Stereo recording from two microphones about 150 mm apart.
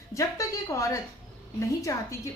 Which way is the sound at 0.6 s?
20° left (ahead or behind).